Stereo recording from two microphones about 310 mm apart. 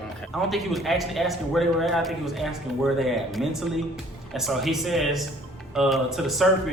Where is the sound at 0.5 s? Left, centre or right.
Centre.